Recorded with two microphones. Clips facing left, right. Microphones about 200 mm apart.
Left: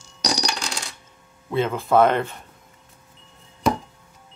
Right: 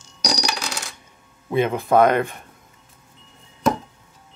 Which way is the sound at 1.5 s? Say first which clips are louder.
Right 2 dB; 15° right (ahead or behind).